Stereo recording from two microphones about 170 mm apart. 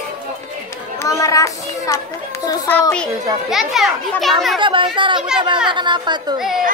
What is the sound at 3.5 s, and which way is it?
Speech, centre (ahead or behind).